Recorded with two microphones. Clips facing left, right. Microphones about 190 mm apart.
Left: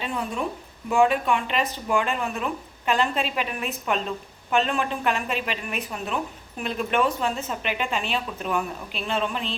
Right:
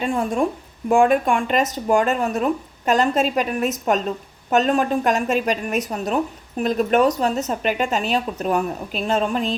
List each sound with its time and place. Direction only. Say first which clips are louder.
0.0 s speech: right 8 dB; 45° right (ahead or behind)